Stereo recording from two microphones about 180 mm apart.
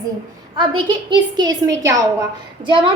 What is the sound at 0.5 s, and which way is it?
A woman's voice, 25° right (ahead or behind).